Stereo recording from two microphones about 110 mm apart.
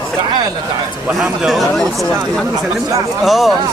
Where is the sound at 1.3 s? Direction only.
Centre (ahead or behind).